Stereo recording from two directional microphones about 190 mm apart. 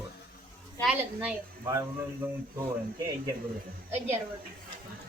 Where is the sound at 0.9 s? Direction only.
15° right (ahead or behind).